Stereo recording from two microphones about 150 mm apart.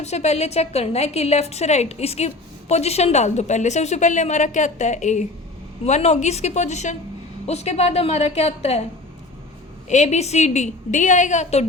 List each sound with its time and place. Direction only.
0.0 s a woman's voice: 45° left (ahead or behind)
9.9 s a woman's voice: 50° left (ahead or behind)